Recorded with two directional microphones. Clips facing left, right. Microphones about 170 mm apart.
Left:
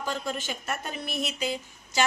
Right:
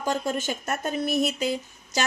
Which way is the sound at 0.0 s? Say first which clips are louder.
Right 5 dB; 45° right (ahead or behind).